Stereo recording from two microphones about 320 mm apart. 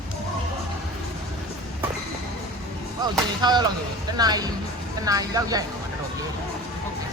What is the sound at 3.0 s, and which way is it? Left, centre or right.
Speech, centre.